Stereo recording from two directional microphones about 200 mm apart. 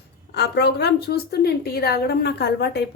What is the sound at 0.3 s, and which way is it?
A woman's voice, 55° left (ahead or behind).